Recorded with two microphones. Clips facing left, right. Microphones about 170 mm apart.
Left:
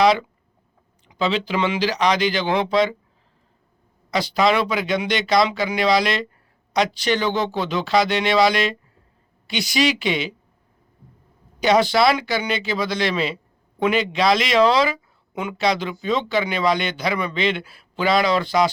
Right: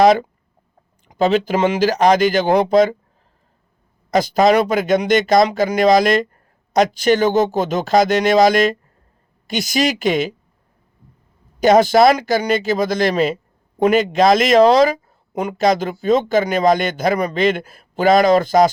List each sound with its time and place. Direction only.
0.0 s speech: 45° right (ahead or behind)
4.1 s speech: 45° right (ahead or behind)
11.6 s speech: 45° right (ahead or behind)